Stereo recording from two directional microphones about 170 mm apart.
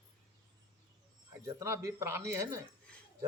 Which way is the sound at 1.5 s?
15° right (ahead or behind).